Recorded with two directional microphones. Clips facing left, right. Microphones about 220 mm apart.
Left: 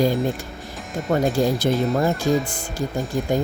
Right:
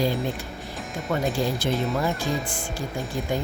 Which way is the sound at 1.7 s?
Centre (ahead or behind).